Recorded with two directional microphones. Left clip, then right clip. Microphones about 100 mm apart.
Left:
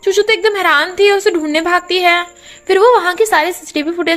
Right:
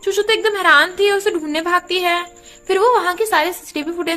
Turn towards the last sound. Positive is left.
turn(degrees=55)  # may be behind; listen again after turning